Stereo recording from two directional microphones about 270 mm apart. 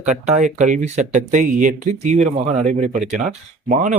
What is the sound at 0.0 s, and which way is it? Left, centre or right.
Speech, right.